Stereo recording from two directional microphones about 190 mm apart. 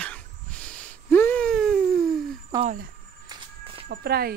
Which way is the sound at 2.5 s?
15° right (ahead or behind).